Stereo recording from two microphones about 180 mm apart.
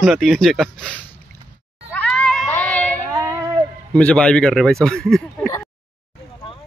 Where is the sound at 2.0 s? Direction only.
5° left (ahead or behind).